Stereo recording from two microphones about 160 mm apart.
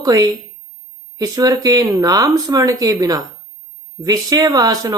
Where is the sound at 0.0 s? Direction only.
20° right (ahead or behind).